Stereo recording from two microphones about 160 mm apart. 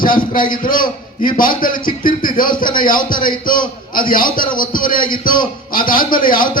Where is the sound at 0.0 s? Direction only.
60° left (ahead or behind).